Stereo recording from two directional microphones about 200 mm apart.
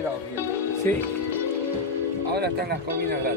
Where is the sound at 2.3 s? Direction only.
55° right (ahead or behind).